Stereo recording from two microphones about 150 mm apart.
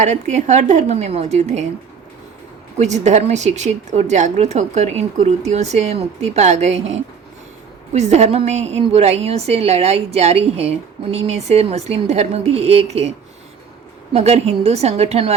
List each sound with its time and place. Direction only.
0.0 s a woman's voice: 50° right (ahead or behind)
2.7 s a woman's voice: 50° right (ahead or behind)